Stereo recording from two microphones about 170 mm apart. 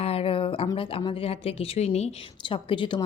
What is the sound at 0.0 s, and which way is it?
A woman's voice, 35° left (ahead or behind).